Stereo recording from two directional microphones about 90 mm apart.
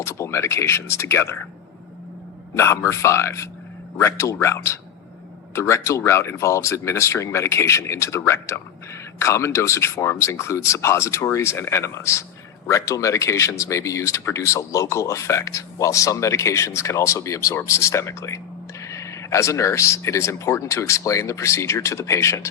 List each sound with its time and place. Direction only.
0.0 s speech: 30° left (ahead or behind)
2.6 s speech: 30° left (ahead or behind)